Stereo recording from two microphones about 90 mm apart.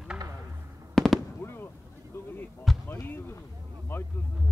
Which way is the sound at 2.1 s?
25° left (ahead or behind).